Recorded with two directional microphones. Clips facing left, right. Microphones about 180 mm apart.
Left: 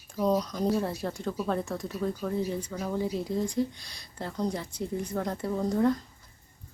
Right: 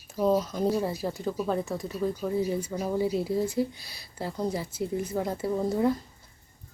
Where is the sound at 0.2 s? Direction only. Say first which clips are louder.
Right 2 dB; 5° right (ahead or behind).